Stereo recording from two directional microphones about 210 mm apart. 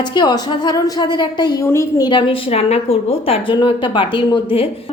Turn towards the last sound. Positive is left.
turn(degrees=25)  # may be behind; listen again after turning